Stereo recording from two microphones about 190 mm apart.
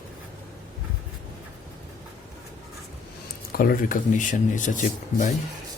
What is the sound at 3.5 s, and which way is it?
Speech, 50° left (ahead or behind).